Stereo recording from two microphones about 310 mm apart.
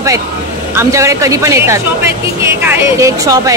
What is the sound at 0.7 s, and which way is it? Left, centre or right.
Speech, centre.